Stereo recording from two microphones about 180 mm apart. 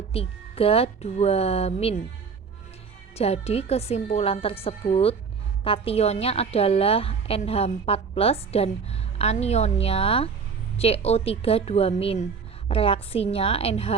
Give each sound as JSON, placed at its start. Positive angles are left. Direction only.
{"t": 0.1, "sound": "a woman's voice", "side_deg": 35}
{"t": 3.2, "sound": "a woman's voice", "side_deg": 35}